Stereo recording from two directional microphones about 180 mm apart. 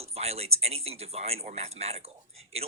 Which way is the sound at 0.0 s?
35° right (ahead or behind).